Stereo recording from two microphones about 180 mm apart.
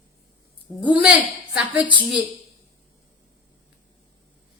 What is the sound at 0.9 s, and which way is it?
Speech, 10° right (ahead or behind).